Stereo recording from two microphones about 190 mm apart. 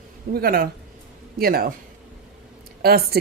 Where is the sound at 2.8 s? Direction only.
55° right (ahead or behind).